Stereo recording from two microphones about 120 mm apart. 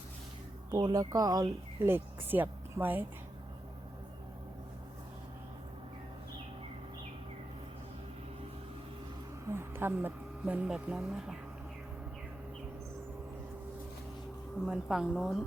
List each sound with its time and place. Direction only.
0.7 s speech: 35° right (ahead or behind)
1.9 s speech: 15° right (ahead or behind)
9.5 s a sound: 20° right (ahead or behind)
10.4 s speech: 10° right (ahead or behind)
14.6 s a woman's voice: 5° right (ahead or behind)